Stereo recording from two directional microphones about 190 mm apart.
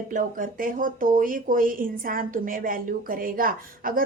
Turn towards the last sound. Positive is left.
turn(degrees=-45)  # may be behind; listen again after turning